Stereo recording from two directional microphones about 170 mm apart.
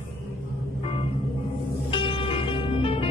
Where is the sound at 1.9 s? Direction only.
30° left (ahead or behind).